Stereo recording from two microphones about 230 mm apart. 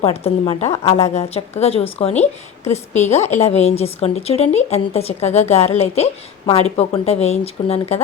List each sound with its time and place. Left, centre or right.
0.0 s a woman's voice: left